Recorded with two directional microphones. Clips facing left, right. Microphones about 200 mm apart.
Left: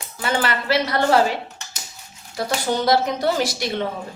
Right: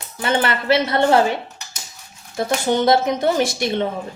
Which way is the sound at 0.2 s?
25° right (ahead or behind).